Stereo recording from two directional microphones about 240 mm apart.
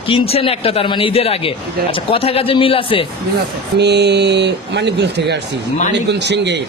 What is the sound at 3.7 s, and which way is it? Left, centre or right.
A man's voice, right.